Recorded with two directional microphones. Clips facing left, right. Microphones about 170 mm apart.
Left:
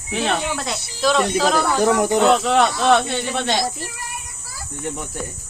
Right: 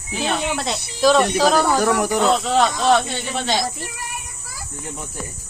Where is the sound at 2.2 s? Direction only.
70° left (ahead or behind).